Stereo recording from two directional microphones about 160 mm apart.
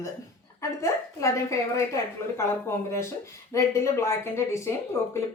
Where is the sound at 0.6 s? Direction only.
20° left (ahead or behind).